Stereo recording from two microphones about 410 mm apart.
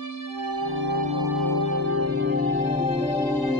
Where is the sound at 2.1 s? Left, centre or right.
Left.